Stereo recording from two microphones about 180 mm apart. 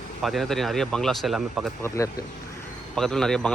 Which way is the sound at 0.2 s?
Centre (ahead or behind).